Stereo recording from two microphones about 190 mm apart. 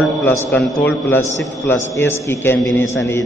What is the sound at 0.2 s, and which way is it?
A man's voice, 10° left (ahead or behind).